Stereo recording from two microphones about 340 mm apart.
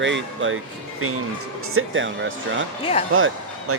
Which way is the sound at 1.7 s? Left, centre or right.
Right.